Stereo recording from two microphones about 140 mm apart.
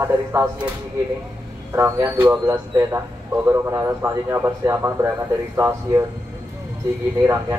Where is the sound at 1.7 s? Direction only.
20° right (ahead or behind).